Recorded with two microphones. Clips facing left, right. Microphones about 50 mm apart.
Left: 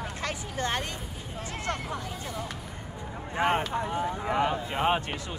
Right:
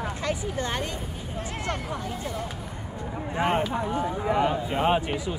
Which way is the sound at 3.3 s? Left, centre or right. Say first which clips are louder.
Right 1 dB; centre.